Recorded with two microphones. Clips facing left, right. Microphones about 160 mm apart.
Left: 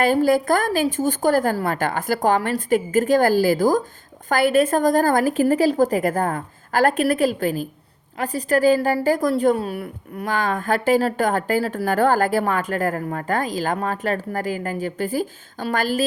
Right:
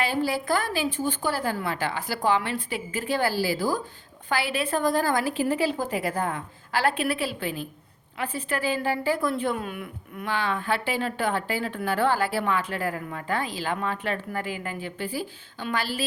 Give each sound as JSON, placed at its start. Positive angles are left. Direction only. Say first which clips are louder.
{"t": 0.0, "sound": "a woman's voice", "louder": "left 9 dB", "side_deg": 45}